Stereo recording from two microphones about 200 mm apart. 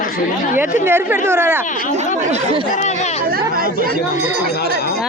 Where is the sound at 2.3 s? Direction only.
30° right (ahead or behind).